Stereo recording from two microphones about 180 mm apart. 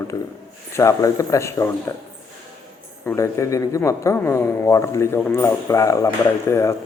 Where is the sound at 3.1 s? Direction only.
15° left (ahead or behind).